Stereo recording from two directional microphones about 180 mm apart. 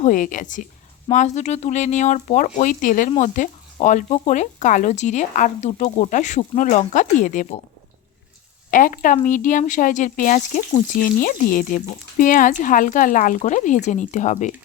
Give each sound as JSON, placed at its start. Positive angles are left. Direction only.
{"t": 0.0, "sound": "speech", "side_deg": 45}
{"t": 8.7, "sound": "speech", "side_deg": 50}